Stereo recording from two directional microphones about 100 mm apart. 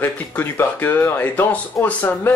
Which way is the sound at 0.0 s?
20° left (ahead or behind).